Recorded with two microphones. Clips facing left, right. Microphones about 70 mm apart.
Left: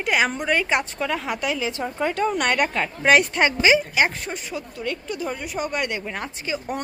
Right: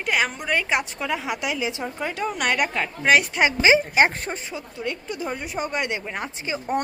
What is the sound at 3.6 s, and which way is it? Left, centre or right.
Speech, right.